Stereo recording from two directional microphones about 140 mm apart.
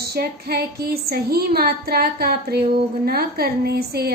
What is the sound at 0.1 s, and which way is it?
A woman's voice, 90° right.